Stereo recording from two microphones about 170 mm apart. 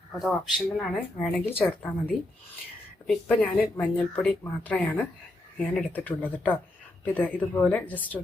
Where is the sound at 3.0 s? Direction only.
5° left (ahead or behind).